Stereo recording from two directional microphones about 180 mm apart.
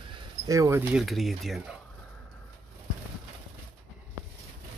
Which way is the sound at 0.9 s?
Centre (ahead or behind).